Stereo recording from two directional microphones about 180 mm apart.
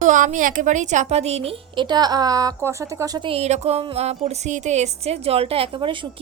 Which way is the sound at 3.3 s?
35° right (ahead or behind).